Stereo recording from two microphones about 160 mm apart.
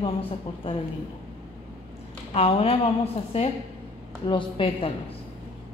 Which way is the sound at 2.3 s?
40° left (ahead or behind).